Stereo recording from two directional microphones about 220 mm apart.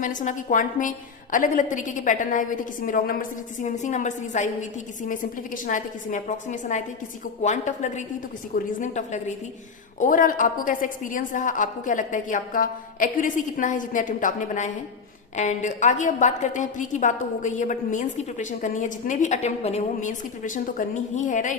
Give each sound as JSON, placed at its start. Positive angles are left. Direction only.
{"t": 0.0, "sound": "a woman's voice", "side_deg": 35}
{"t": 5.6, "sound": "a woman's voice", "side_deg": 35}